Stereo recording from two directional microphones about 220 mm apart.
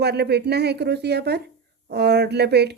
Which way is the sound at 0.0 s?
50° right (ahead or behind).